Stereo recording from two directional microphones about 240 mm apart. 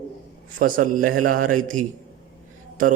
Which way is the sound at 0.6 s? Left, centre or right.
Right.